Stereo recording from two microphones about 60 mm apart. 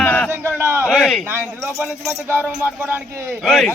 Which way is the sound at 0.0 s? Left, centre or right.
Left.